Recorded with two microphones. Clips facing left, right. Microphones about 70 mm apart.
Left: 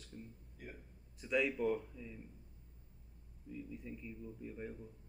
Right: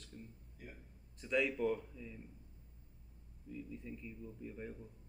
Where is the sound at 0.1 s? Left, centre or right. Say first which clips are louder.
Left 2 dB; centre.